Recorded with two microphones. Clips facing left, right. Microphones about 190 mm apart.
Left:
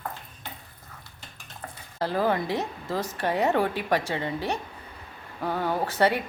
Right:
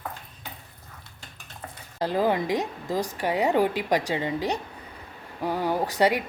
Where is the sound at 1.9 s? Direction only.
15° right (ahead or behind).